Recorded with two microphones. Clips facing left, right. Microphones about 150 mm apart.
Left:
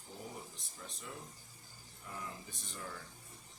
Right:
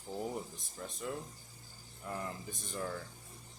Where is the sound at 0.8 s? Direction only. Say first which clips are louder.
Right 7 dB; 50° right (ahead or behind).